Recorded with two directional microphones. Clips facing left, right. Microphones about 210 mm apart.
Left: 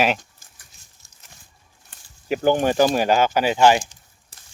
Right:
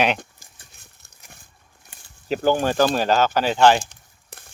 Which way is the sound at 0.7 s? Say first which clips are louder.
Right 4 dB; 60° right (ahead or behind).